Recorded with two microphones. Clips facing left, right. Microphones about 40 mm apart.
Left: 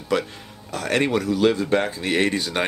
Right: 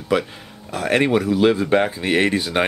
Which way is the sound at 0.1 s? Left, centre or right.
Centre.